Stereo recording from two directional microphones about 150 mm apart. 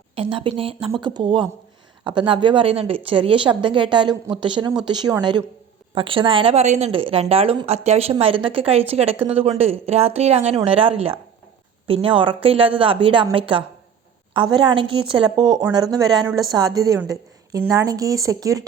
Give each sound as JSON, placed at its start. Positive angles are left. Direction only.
{"t": 0.2, "sound": "speech", "side_deg": -35}